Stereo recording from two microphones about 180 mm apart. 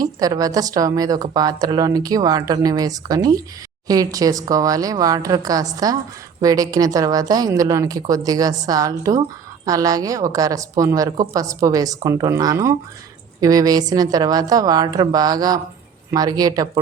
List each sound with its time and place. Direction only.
0.0 s a woman's voice: 20° right (ahead or behind)